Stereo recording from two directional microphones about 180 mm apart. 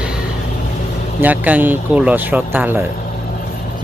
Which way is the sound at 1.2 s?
10° right (ahead or behind).